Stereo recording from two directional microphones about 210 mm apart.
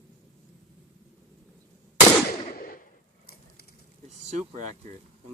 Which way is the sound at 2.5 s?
45° left (ahead or behind).